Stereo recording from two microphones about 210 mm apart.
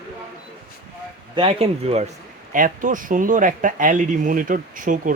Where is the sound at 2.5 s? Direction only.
40° right (ahead or behind).